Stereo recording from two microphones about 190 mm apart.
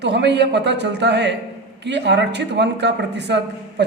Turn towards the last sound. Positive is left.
turn(degrees=-65)  # may be behind; listen again after turning